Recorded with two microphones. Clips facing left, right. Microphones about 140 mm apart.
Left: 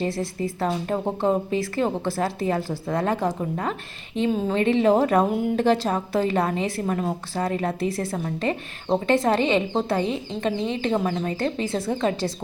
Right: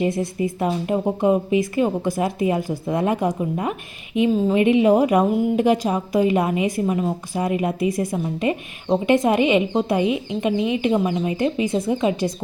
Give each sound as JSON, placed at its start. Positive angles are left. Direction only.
{"t": 0.0, "sound": "a woman's voice", "side_deg": -20}